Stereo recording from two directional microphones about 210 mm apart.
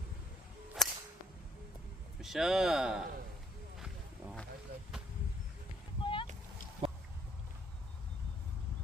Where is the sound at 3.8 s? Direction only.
5° right (ahead or behind).